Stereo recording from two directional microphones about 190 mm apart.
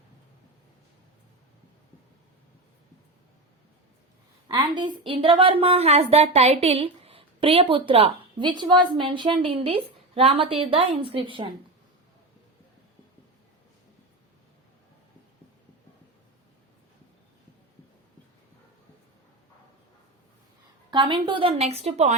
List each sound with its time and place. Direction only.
4.4 s speech: 25° right (ahead or behind)
20.9 s a woman's voice: 25° right (ahead or behind)